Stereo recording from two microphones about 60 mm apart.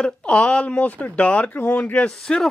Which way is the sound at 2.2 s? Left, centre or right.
Centre.